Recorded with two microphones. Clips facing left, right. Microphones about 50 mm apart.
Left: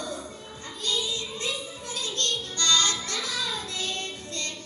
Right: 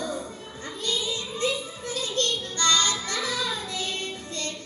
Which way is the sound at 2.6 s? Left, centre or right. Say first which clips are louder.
Right 1 dB; right.